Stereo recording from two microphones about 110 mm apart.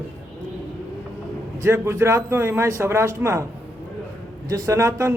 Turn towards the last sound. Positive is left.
turn(degrees=-25)  # may be behind; listen again after turning